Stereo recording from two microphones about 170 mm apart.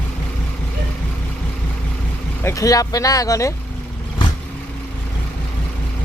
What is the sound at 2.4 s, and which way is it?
Speech, 20° left (ahead or behind).